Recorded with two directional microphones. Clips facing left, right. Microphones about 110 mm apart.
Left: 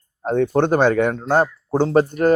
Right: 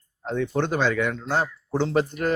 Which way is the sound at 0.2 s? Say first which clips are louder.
Left 7 dB; 50° left (ahead or behind).